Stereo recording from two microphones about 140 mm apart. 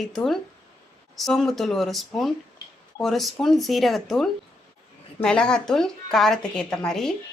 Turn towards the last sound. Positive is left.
turn(degrees=5)  # may be behind; listen again after turning